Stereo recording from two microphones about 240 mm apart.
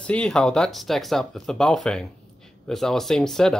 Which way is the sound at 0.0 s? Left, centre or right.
Centre.